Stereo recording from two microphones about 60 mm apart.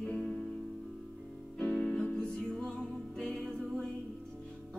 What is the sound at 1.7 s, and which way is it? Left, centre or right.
Music, centre.